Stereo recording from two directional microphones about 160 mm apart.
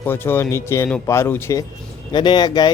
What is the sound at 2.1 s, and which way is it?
Speech, 30° left (ahead or behind).